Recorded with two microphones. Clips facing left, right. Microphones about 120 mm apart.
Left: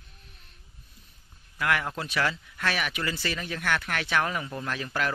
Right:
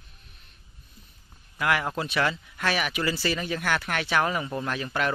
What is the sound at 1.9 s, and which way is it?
Speech, 5° right (ahead or behind).